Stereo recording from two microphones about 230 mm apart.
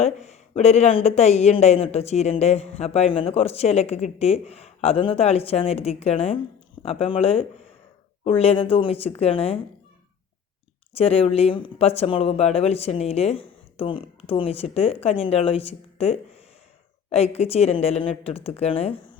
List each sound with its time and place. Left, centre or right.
0.0 s speech: left
10.9 s speech: left